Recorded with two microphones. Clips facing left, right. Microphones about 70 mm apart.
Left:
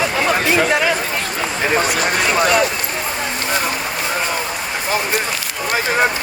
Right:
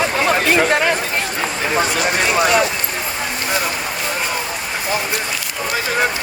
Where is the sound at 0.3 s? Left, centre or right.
Right.